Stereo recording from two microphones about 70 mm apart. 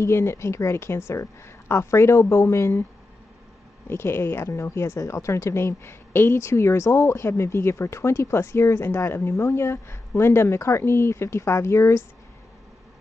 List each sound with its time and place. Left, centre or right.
0.0 s a woman's voice: left
3.8 s a woman's voice: left